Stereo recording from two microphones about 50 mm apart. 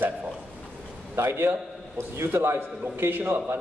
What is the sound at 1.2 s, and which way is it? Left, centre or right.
A man's voice, right.